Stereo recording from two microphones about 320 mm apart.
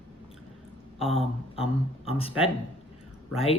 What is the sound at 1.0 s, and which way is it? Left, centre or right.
Speech, centre.